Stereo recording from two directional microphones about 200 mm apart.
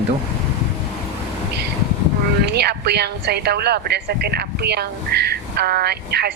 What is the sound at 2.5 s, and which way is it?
A woman's voice, 55° right (ahead or behind).